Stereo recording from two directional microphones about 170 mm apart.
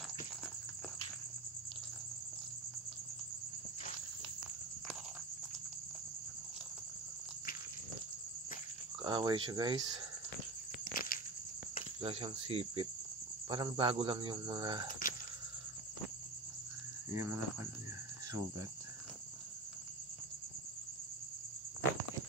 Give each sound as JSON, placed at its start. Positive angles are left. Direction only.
{"t": 9.0, "sound": "speech", "side_deg": -25}
{"t": 10.8, "sound": "a sound", "side_deg": 55}
{"t": 12.0, "sound": "cricket", "side_deg": -35}
{"t": 13.5, "sound": "speech", "side_deg": -30}
{"t": 14.9, "sound": "a sound", "side_deg": 55}
{"t": 17.1, "sound": "cricket", "side_deg": -15}